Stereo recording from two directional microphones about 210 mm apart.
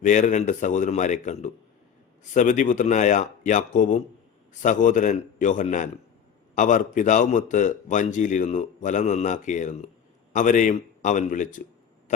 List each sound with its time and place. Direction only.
0.0 s speech: 35° left (ahead or behind)